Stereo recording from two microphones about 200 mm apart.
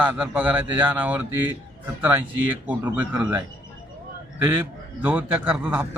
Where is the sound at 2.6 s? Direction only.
10° right (ahead or behind).